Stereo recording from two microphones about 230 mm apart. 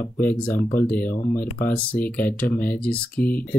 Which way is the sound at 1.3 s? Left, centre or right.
Left.